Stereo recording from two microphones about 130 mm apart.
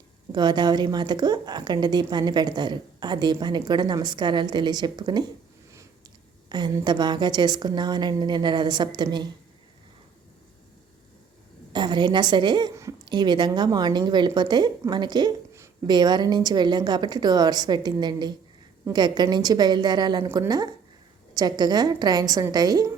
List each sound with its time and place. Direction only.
0.3 s a woman's voice: 35° right (ahead or behind)
6.5 s a woman's voice: 35° right (ahead or behind)
11.7 s a woman's voice: 35° right (ahead or behind)